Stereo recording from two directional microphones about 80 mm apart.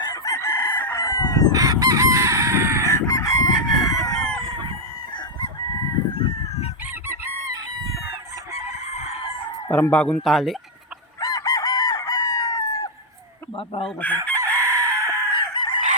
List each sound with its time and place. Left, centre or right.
0.0 s chicken: left
0.3 s chicken: left
0.9 s chicken: left
1.5 s chicken: right
2.9 s chicken: left
9.6 s a sound: left
9.9 s speech: centre
10.2 s speech: centre
11.2 s chicken: left
14.0 s chicken: left
14.6 s chicken: right
15.3 s chicken: left